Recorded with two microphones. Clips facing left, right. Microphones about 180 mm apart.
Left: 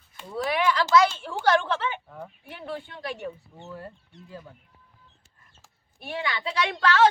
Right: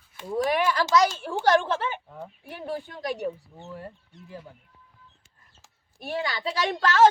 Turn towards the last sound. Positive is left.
turn(degrees=-45)  # may be behind; listen again after turning